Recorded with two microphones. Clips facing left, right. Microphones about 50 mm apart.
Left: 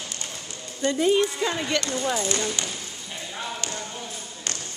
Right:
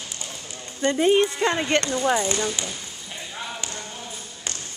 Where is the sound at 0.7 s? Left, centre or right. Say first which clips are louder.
Right 2 dB; right.